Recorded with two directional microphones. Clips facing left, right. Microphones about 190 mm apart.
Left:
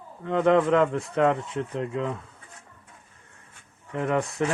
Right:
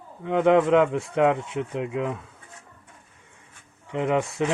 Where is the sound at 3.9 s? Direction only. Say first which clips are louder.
Right 2 dB; 20° right (ahead or behind).